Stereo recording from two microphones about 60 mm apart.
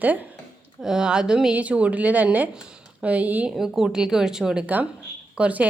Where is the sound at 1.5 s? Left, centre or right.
Right.